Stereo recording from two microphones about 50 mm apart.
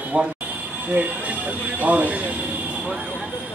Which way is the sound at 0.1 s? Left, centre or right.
Right.